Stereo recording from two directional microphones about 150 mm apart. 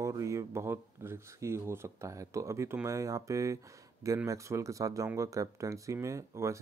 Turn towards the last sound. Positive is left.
turn(degrees=-20)  # may be behind; listen again after turning